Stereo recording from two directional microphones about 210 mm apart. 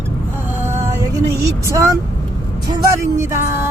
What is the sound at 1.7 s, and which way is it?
Speech, 15° right (ahead or behind).